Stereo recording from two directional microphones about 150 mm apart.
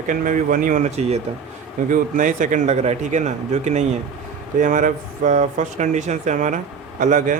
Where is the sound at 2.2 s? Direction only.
60° right (ahead or behind).